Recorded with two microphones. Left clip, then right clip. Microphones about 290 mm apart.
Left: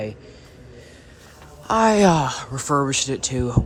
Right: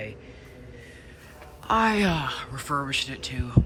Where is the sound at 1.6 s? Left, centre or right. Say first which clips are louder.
Left 6 dB; centre.